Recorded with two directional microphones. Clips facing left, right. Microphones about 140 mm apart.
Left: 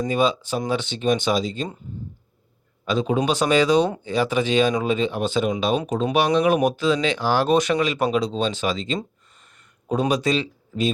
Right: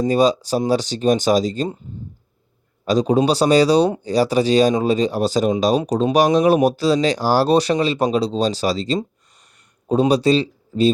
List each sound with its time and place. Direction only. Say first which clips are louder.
0.0 s speech: right 5 dB; 40° right (ahead or behind)
2.8 s speech: right 5 dB; 40° right (ahead or behind)